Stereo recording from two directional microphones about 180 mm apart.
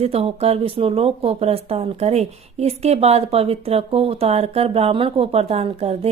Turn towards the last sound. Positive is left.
turn(degrees=-35)  # may be behind; listen again after turning